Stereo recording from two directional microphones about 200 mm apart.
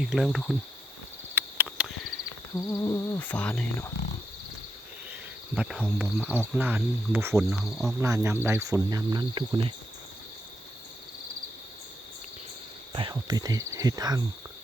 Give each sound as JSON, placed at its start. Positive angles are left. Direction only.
{"t": 0.0, "sound": "cricket", "side_deg": 0}
{"t": 1.4, "sound": "a sound", "side_deg": -10}
{"t": 2.6, "sound": "a sound", "side_deg": 15}
{"t": 5.5, "sound": "speech", "side_deg": -5}
{"t": 7.6, "sound": "cricket", "side_deg": 0}
{"t": 8.0, "sound": "speech", "side_deg": -15}
{"t": 12.9, "sound": "cricket", "side_deg": -25}